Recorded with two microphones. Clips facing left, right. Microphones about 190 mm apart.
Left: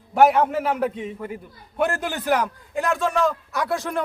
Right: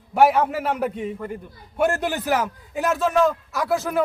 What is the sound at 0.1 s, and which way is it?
A man's voice, 5° right (ahead or behind).